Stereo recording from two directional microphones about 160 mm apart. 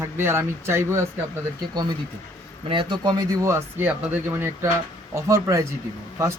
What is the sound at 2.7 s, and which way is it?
Speech, 30° right (ahead or behind).